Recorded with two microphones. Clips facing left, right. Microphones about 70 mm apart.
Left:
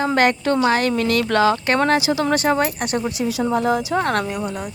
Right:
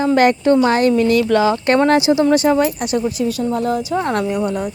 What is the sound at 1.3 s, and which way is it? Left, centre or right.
Speech, centre.